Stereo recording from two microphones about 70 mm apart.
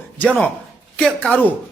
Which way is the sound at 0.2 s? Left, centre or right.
Centre.